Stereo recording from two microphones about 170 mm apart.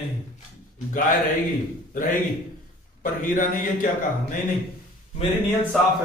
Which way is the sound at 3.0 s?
50° left (ahead or behind).